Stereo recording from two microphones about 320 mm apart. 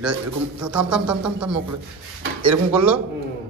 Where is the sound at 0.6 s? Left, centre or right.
Centre.